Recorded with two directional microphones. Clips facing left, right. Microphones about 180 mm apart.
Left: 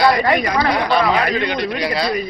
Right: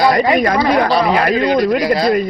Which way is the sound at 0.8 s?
40° right (ahead or behind).